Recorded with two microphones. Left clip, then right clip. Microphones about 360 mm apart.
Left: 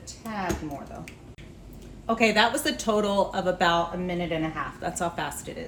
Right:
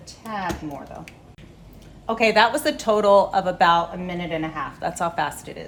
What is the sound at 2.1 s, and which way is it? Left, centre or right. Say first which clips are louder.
A woman's voice: right 4 dB; centre.